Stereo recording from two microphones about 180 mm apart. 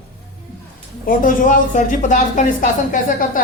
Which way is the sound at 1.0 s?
50° left (ahead or behind).